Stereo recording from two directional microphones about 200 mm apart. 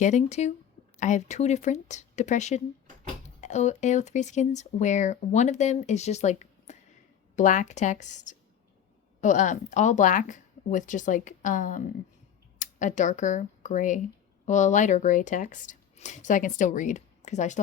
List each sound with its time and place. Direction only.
0.0 s speech: 35° left (ahead or behind)